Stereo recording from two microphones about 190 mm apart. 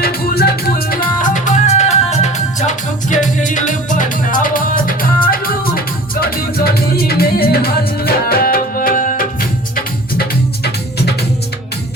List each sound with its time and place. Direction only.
0.0 s music: 55° left (ahead or behind)
10.2 s music: 60° left (ahead or behind)